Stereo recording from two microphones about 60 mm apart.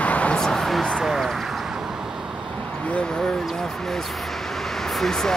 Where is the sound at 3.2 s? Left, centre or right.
Centre.